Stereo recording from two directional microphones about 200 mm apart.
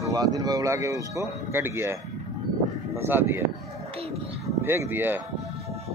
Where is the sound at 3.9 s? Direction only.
30° right (ahead or behind).